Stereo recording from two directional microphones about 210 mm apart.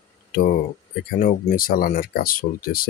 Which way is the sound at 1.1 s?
40° left (ahead or behind).